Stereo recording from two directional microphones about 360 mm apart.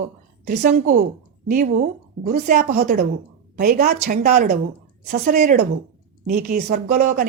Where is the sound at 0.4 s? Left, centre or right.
Right.